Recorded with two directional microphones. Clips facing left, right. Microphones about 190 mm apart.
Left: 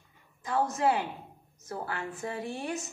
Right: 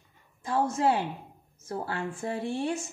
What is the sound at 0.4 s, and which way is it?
A woman's voice, 30° right (ahead or behind).